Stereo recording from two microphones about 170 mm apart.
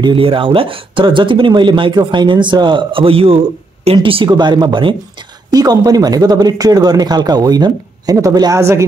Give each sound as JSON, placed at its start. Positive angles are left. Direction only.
{"t": 0.0, "sound": "speech", "side_deg": -30}